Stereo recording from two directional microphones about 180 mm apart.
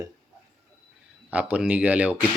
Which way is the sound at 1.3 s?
10° right (ahead or behind).